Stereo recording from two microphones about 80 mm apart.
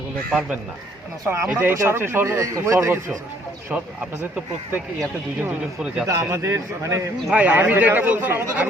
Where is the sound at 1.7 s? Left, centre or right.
Right.